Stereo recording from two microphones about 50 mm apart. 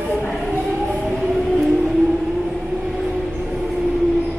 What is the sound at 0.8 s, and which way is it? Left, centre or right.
Train, centre.